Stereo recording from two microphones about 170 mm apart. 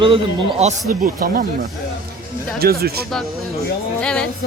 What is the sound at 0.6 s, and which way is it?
Speech, 50° right (ahead or behind).